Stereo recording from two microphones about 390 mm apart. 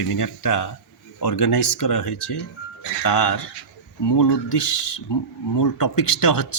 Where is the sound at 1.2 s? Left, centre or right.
Left.